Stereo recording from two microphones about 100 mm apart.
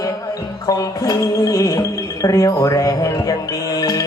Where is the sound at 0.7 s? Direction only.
35° left (ahead or behind).